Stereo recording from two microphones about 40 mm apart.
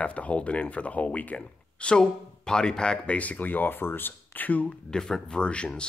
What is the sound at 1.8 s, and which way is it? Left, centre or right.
Speech, left.